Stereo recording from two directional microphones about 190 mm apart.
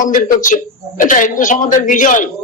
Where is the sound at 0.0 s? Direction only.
45° left (ahead or behind).